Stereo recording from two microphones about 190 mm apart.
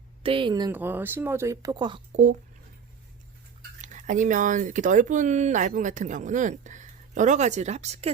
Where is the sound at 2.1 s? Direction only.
40° right (ahead or behind).